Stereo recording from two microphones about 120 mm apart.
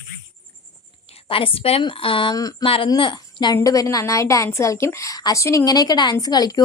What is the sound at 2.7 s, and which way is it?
A woman's voice, 45° left (ahead or behind).